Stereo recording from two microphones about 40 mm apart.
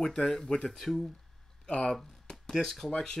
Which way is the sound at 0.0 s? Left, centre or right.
Centre.